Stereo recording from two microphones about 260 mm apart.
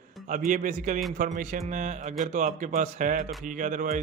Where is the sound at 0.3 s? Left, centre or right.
Right.